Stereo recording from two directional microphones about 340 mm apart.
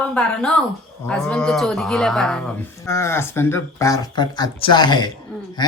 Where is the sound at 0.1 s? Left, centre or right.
Centre.